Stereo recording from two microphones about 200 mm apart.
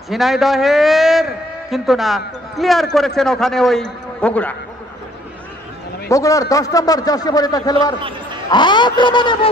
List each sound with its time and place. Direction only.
0.1 s a man's voice: centre (ahead or behind)
6.0 s a man's voice: 15° left (ahead or behind)